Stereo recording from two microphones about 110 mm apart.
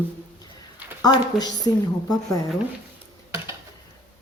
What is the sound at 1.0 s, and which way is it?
A woman's voice, 40° left (ahead or behind).